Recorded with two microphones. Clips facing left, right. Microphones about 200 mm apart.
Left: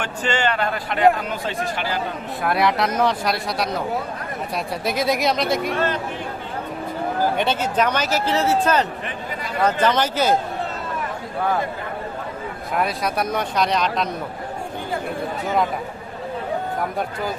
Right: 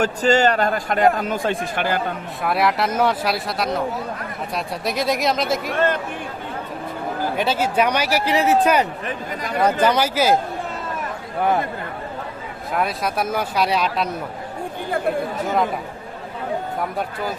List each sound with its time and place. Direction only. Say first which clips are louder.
0.0 s a man's voice: right 6 dB; 40° right (ahead or behind)
2.4 s speech: even; centre (ahead or behind)
7.3 s a man's voice: right 1 dB; 5° right (ahead or behind)
12.7 s speech: even; centre (ahead or behind)